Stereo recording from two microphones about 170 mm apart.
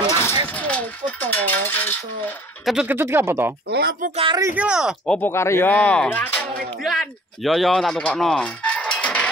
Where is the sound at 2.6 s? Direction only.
5° right (ahead or behind).